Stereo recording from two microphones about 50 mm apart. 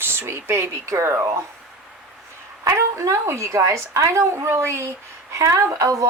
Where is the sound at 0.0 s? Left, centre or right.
Right.